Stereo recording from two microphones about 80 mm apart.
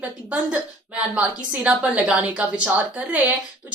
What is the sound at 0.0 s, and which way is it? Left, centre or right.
A woman's voice, centre.